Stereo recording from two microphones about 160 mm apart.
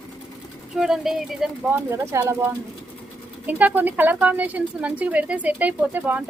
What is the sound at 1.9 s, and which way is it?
Speech, 15° right (ahead or behind).